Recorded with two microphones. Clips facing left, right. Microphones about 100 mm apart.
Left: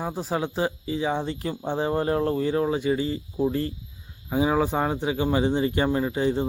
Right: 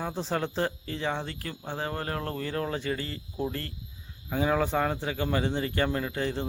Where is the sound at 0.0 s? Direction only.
10° left (ahead or behind).